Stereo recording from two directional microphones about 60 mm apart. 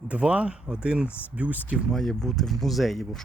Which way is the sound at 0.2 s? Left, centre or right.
Centre.